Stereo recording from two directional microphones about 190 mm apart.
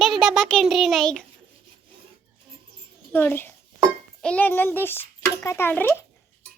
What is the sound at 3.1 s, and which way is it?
A child's voice, 10° left (ahead or behind).